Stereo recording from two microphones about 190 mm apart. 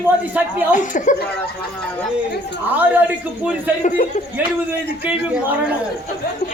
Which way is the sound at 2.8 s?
10° right (ahead or behind).